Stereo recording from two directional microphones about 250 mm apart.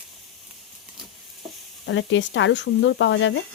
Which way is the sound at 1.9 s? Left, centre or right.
Left.